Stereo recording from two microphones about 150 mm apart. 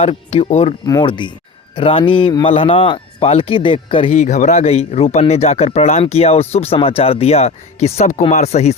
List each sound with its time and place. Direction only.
0.0 s speech: 40° left (ahead or behind)
0.9 s a man's voice: 30° left (ahead or behind)
4.2 s speech: 55° left (ahead or behind)